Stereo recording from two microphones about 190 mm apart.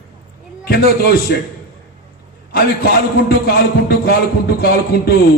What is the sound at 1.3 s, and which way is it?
Speech, 60° left (ahead or behind).